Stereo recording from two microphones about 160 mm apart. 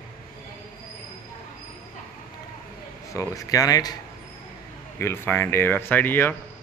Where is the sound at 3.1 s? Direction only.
20° left (ahead or behind).